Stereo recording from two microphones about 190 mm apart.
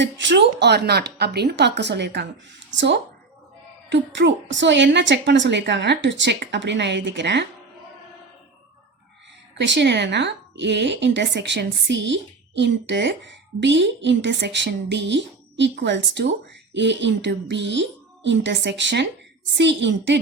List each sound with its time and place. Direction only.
0.0 s a woman's voice: 70° right (ahead or behind)
9.6 s speech: 70° right (ahead or behind)